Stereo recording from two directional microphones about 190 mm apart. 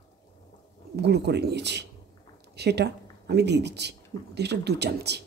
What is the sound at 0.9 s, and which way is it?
Speech, 60° right (ahead or behind).